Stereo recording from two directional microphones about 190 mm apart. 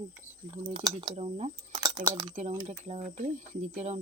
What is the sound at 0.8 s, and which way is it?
Speech, 25° right (ahead or behind).